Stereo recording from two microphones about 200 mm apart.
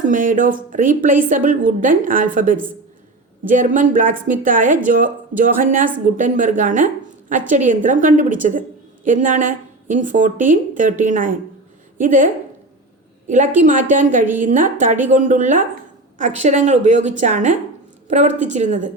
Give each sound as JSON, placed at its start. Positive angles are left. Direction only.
{"t": 0.0, "sound": "a woman's voice", "side_deg": -40}